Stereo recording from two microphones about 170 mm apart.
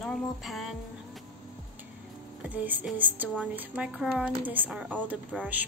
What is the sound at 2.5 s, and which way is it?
Speech, 10° right (ahead or behind).